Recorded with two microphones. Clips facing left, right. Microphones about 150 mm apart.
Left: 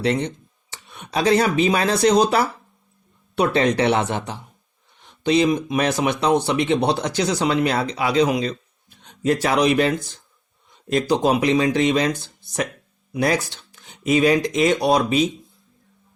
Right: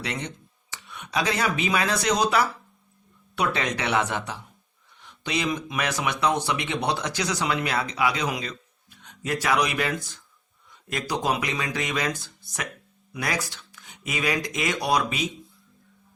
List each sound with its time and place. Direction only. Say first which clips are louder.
0.0 s speech: left 11 dB; 30° left (ahead or behind)